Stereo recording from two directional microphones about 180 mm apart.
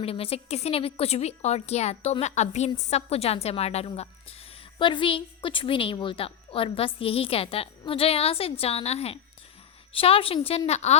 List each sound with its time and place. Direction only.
0.0 s a woman's voice: 35° left (ahead or behind)